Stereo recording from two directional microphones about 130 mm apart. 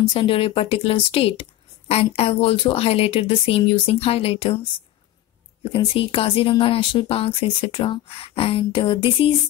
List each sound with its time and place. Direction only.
0.1 s speech: 40° left (ahead or behind)
5.7 s speech: 45° left (ahead or behind)